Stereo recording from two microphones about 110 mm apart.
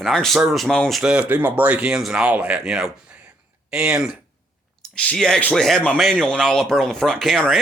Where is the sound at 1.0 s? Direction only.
10° right (ahead or behind).